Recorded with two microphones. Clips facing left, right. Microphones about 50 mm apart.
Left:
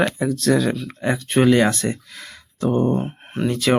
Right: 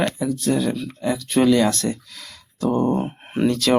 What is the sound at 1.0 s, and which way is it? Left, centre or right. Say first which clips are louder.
Speech: left 1 dB; left.